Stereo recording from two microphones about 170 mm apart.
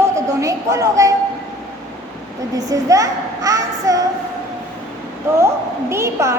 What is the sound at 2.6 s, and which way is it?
A child's voice, 20° right (ahead or behind).